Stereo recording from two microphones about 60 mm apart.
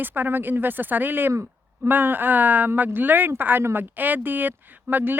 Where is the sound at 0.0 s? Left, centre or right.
Right.